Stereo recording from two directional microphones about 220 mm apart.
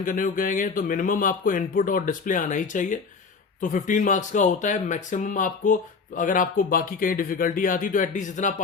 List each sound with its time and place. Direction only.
0.0 s speech: 40° left (ahead or behind)